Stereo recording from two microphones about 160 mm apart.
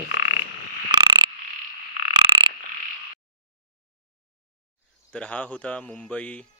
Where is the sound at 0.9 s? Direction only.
30° right (ahead or behind).